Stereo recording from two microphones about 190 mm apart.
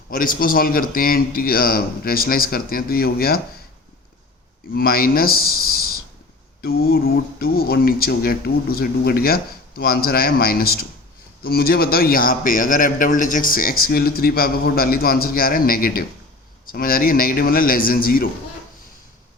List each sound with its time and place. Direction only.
0.1 s a man's voice: 45° left (ahead or behind)
4.7 s a man's voice: 50° left (ahead or behind)